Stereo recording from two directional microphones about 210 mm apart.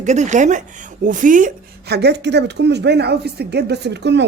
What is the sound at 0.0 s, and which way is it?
Speech, 35° right (ahead or behind).